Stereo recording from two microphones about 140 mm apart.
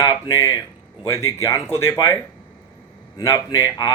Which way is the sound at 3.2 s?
25° left (ahead or behind).